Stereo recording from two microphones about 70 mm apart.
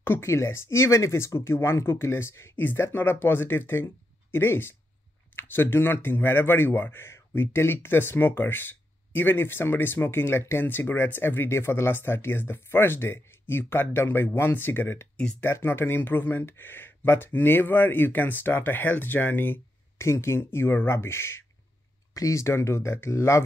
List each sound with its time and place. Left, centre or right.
0.0 s speech: left
2.5 s speech: left
22.1 s speech: left